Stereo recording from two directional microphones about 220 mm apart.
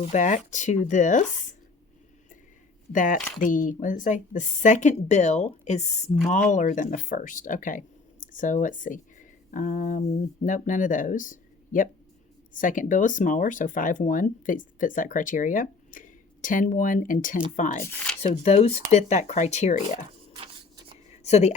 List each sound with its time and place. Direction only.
0.0 s speech: 35° left (ahead or behind)
2.9 s speech: 35° left (ahead or behind)
17.8 s speech: 5° left (ahead or behind)
18.2 s speech: 30° left (ahead or behind)
20.3 s a sound: 20° right (ahead or behind)
21.1 s a sound: 30° left (ahead or behind)